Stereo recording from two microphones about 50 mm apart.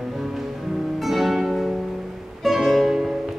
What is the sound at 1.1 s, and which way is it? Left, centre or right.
Music, centre.